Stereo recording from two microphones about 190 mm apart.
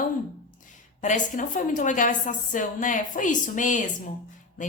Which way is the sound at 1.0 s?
40° left (ahead or behind).